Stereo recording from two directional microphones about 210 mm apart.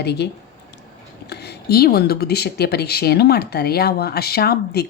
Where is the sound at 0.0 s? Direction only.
55° left (ahead or behind).